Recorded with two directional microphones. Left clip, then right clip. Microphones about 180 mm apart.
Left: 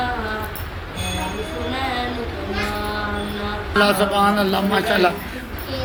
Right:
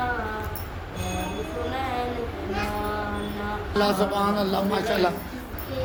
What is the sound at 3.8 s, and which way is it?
A man's voice, centre (ahead or behind).